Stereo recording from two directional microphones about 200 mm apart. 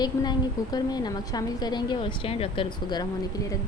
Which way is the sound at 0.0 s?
20° left (ahead or behind).